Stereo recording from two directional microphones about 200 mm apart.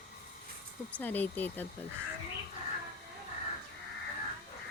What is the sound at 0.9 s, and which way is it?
Speech, 10° left (ahead or behind).